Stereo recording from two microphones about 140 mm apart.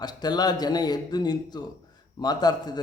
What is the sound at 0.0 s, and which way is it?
A man's voice, 30° left (ahead or behind).